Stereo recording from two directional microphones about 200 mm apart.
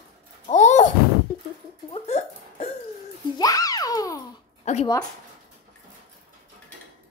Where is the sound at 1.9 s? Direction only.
35° left (ahead or behind).